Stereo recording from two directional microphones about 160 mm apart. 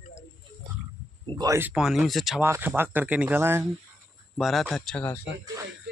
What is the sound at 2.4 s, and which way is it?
Speech, 15° right (ahead or behind).